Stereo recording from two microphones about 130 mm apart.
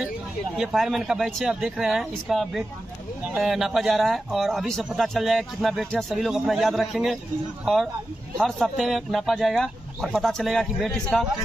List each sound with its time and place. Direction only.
0.6 s speech: centre (ahead or behind)